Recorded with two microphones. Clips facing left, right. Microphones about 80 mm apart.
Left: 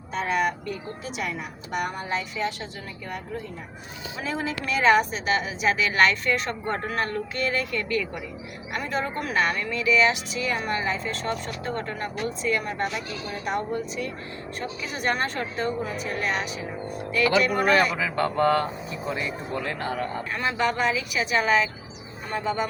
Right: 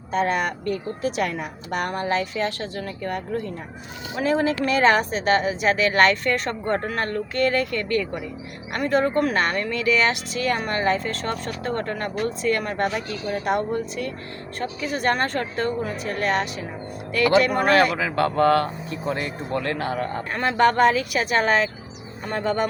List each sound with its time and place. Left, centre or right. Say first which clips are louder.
0.1 s a woman's voice: right 2 dB; right
4.2 s speech: right 9 dB; right
14.6 s speech: right 5 dB; right
17.7 s a woman's voice: right 3 dB; right
20.3 s speech: right 7 dB; right